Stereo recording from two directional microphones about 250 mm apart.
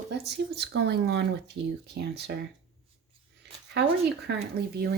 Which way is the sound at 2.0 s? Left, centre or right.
Right.